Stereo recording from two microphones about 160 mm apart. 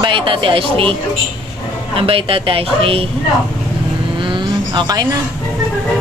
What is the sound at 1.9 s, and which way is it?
Speech, 35° right (ahead or behind).